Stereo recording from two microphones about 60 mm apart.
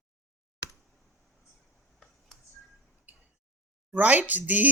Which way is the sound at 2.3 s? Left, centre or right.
Centre.